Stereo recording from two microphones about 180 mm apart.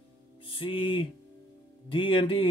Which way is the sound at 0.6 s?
30° left (ahead or behind).